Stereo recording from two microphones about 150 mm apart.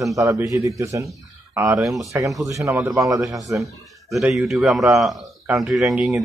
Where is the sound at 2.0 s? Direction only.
20° right (ahead or behind).